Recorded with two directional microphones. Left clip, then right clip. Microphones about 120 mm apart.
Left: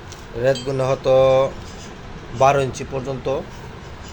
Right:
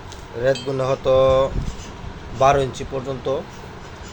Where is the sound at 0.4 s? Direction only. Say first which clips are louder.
Left 1 dB; 20° left (ahead or behind).